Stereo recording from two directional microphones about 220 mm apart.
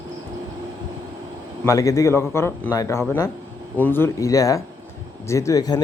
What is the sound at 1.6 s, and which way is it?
Speech, 15° left (ahead or behind).